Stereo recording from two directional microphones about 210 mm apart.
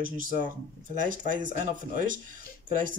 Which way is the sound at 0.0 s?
40° right (ahead or behind).